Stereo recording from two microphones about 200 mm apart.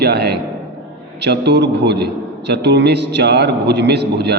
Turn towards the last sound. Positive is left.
turn(degrees=-55)  # may be behind; listen again after turning